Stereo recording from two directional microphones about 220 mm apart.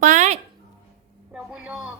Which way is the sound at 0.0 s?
35° right (ahead or behind).